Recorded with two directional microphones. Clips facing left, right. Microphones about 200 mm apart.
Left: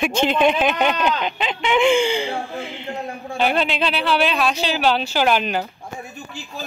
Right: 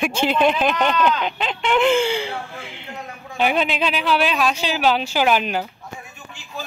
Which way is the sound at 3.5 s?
5° right (ahead or behind).